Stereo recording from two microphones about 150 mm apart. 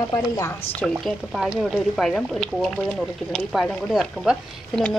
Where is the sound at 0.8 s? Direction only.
Centre (ahead or behind).